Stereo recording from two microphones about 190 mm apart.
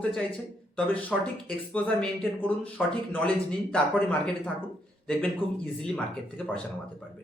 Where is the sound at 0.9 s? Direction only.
10° left (ahead or behind).